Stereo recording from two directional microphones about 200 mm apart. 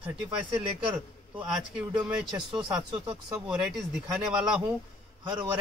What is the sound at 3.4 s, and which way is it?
Speech, centre (ahead or behind).